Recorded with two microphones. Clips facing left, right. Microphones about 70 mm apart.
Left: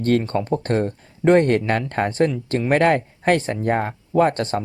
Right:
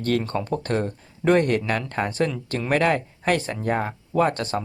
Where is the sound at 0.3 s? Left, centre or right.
Left.